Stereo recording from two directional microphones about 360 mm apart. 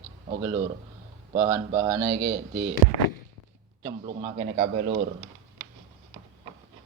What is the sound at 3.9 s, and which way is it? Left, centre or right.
Speech, centre.